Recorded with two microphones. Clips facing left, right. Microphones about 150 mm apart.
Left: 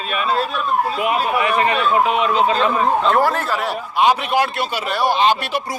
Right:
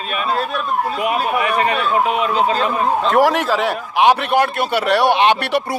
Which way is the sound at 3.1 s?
90° right.